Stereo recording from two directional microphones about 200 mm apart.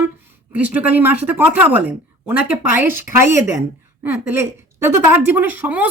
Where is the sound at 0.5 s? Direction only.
10° right (ahead or behind).